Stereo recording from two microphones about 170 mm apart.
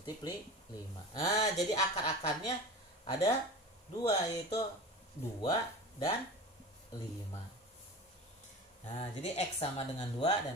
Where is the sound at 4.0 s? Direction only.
20° left (ahead or behind).